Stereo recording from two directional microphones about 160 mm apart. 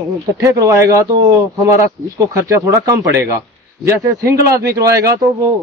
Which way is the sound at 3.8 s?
20° right (ahead or behind).